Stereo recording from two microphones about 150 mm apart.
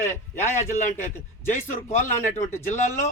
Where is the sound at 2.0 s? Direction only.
50° left (ahead or behind).